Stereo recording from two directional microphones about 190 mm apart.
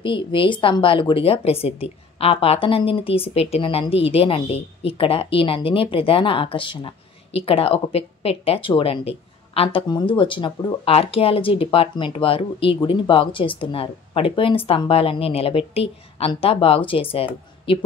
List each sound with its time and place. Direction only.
0.0 s speech: 25° left (ahead or behind)